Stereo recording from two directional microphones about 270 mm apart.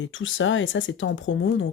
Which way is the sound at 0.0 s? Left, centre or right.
Left.